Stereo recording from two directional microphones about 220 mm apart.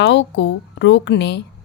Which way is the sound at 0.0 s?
55° left (ahead or behind).